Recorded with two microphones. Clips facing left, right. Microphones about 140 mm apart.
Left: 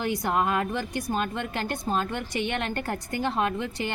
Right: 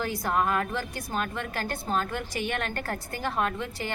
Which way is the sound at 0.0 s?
20° left (ahead or behind).